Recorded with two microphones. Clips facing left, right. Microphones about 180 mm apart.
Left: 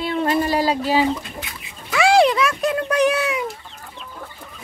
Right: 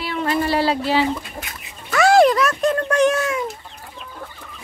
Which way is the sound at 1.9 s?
Centre (ahead or behind).